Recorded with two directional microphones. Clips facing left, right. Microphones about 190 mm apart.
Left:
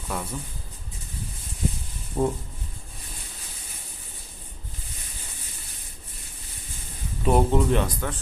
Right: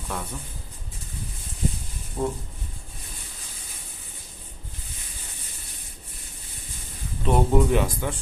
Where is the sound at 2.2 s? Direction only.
25° left (ahead or behind).